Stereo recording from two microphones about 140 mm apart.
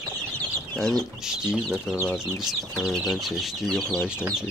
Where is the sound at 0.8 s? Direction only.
5° left (ahead or behind).